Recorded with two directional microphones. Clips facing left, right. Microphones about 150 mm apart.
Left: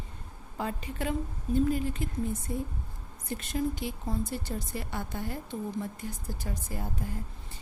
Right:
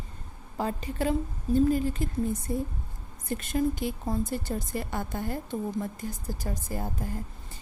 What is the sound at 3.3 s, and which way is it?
A woman's voice, 50° right (ahead or behind).